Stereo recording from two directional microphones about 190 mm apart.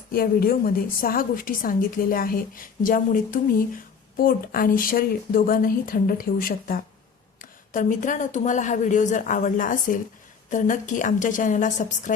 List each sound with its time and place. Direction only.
0.1 s a woman's voice: 50° left (ahead or behind)